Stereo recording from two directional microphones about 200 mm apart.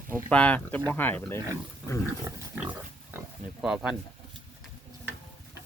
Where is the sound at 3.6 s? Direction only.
5° right (ahead or behind).